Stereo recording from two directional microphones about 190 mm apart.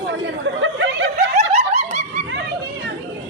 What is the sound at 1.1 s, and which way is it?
Snicker, 35° right (ahead or behind).